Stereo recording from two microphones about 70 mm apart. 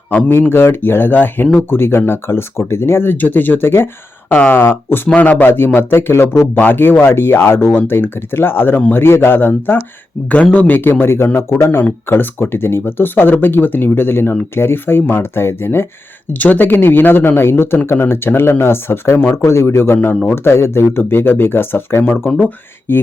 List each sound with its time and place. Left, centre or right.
0.5 s speech: left
16.3 s speech: left